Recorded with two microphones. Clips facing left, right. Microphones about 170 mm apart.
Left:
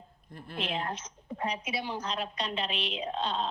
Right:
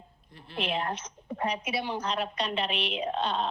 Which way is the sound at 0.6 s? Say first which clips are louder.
Right 3 dB; 65° right (ahead or behind).